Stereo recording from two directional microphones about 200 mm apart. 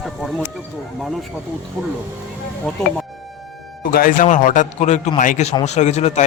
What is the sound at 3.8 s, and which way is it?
A man's voice, 45° left (ahead or behind).